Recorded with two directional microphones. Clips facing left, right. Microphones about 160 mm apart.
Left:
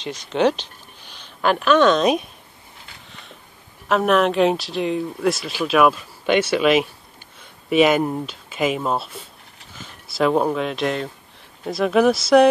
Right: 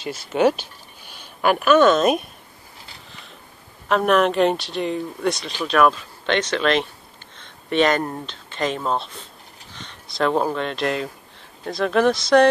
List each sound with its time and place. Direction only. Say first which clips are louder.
0.0 s speech: right 1 dB; 5° right (ahead or behind)
3.1 s a sound: left 1 dB; centre (ahead or behind)
3.9 s speech: even; centre (ahead or behind)